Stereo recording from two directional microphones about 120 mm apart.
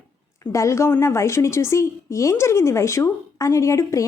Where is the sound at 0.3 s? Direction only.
25° left (ahead or behind).